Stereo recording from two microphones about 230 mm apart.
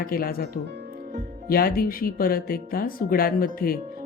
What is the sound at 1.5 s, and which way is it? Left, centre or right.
Speech, left.